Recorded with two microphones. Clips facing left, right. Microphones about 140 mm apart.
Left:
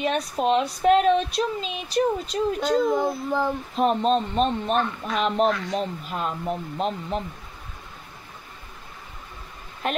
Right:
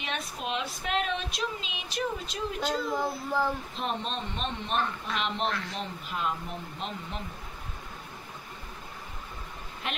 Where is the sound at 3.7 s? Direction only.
45° left (ahead or behind).